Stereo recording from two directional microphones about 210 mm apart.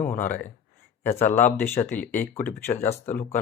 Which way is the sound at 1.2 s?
35° left (ahead or behind).